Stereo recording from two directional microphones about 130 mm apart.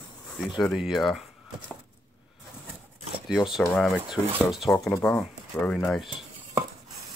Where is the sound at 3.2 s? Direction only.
Centre (ahead or behind).